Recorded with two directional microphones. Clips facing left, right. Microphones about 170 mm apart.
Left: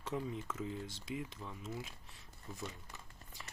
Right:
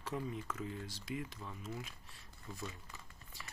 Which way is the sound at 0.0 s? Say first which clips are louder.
Left 1 dB; 20° left (ahead or behind).